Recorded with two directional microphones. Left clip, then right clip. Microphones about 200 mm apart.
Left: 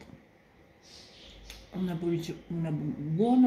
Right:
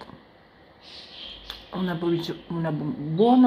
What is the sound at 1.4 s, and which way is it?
A woman's voice, 20° left (ahead or behind).